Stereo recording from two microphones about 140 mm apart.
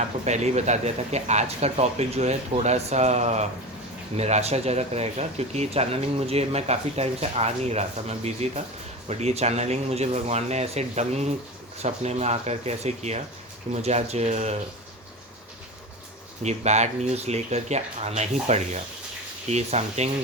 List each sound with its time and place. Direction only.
0.3 s speech: 55° right (ahead or behind)
16.4 s speech: 55° right (ahead or behind)